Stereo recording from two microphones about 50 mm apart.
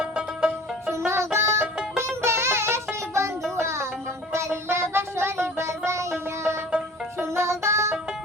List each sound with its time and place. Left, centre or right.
1.0 s music: right